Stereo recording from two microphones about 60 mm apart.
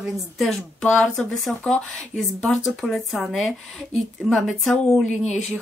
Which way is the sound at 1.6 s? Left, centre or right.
Centre.